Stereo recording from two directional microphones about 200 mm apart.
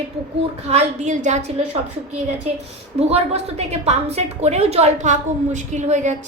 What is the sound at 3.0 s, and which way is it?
A woman's voice, 30° right (ahead or behind).